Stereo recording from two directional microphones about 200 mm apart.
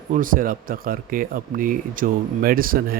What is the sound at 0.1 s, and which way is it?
Speech, 45° right (ahead or behind).